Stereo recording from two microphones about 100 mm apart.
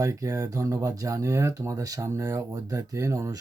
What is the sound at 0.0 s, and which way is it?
Speech, 30° right (ahead or behind).